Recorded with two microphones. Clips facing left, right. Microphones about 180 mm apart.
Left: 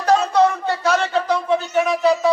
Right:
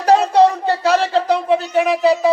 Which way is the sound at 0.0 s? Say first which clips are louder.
Right 4 dB; 30° right (ahead or behind).